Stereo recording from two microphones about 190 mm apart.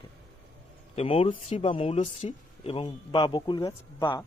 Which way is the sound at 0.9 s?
30° left (ahead or behind).